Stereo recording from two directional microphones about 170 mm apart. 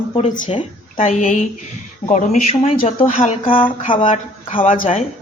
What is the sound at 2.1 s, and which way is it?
Speech, 45° left (ahead or behind).